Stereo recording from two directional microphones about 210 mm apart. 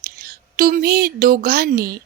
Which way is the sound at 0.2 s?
45° right (ahead or behind).